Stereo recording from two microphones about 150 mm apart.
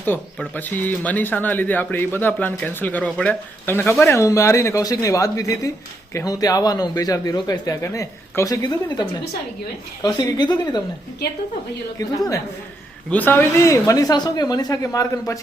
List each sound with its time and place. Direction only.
0.0 s a man's voice: 10° left (ahead or behind); by 10.8 s 30° left (ahead or behind)
11.9 s a man's voice: 20° left (ahead or behind)
13.1 s a man's voice: 10° left (ahead or behind)